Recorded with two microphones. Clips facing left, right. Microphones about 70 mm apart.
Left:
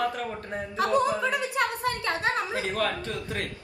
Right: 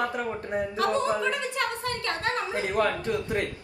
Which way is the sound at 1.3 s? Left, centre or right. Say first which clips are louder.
Left 2 dB; centre.